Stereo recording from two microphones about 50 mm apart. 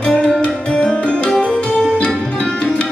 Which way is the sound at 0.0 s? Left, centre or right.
Left.